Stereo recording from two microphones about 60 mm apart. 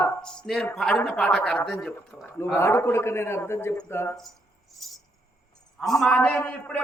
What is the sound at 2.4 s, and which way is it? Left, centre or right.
A man's voice, left.